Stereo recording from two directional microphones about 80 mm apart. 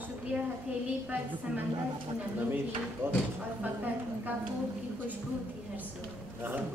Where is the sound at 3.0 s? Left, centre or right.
Right.